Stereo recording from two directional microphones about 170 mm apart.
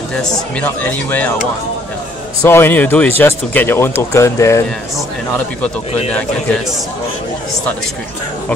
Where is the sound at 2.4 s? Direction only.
15° left (ahead or behind).